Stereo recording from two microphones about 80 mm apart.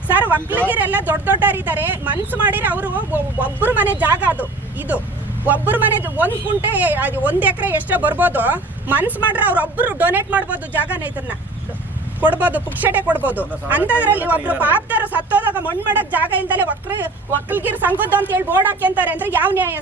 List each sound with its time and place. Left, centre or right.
0.1 s vehicle: right
0.7 s speech: right
5.5 s speech: right